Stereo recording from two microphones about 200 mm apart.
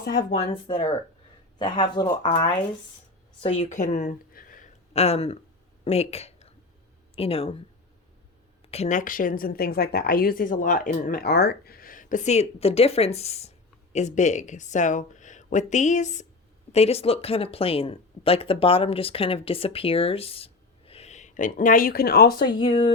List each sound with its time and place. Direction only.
0.5 s speech: 25° left (ahead or behind)
3.4 s speech: 30° left (ahead or behind)
8.7 s a woman's voice: 35° left (ahead or behind); by 22.4 s 50° left (ahead or behind)
22.6 s speech: 35° left (ahead or behind)